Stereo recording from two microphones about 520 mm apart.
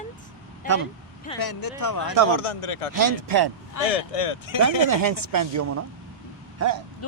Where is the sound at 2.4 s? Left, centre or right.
Left.